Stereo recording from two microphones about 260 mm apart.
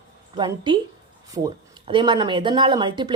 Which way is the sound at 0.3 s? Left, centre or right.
Centre.